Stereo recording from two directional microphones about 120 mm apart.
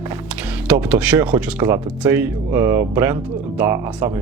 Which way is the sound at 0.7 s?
15° right (ahead or behind).